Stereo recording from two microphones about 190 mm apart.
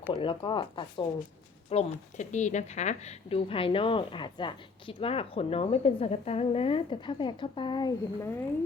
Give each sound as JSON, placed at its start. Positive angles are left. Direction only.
{"t": 0.1, "sound": "a woman's voice", "side_deg": 25}
{"t": 1.7, "sound": "a woman's voice", "side_deg": 35}